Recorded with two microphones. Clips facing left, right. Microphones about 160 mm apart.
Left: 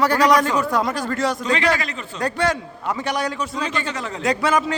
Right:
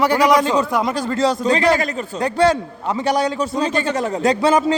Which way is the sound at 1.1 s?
35° right (ahead or behind).